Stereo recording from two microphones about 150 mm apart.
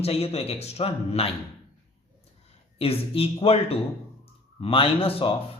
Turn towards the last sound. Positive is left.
turn(degrees=40)  # may be behind; listen again after turning